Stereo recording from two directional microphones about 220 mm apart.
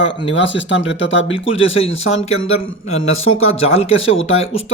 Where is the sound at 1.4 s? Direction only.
25° left (ahead or behind).